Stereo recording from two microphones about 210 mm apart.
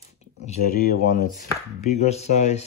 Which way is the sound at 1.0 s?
40° left (ahead or behind).